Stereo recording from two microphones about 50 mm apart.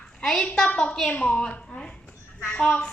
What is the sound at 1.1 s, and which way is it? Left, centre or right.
Speech, centre.